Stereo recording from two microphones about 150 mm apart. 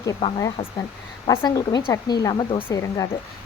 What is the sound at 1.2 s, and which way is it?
Speech, 25° left (ahead or behind).